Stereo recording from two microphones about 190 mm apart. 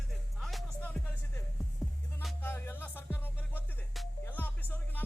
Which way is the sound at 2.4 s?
10° left (ahead or behind).